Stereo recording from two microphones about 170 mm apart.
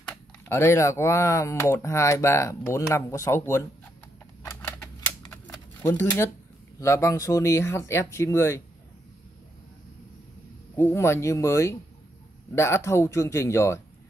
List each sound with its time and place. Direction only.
0.0 s speech: 10° left (ahead or behind)
4.5 s typewriter: 10° left (ahead or behind)
5.8 s speech: 10° left (ahead or behind)
10.8 s speech: 15° left (ahead or behind)